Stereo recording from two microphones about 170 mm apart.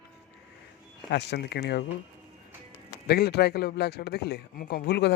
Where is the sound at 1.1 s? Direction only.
80° left.